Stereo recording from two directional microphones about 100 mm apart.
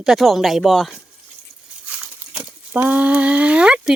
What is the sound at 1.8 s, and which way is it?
Crumpling, 15° right (ahead or behind).